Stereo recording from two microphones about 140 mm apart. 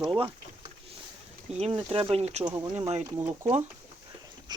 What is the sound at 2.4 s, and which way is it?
Speech, 25° right (ahead or behind).